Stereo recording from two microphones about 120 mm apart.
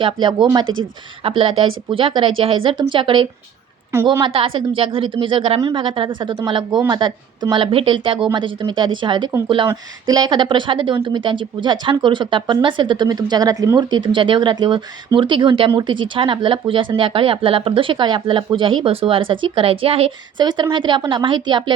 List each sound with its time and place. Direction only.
0.0 s a woman's voice: 40° right (ahead or behind)
20.4 s a woman's voice: 40° right (ahead or behind)